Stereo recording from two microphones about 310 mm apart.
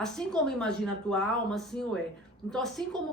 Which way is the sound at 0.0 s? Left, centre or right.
Centre.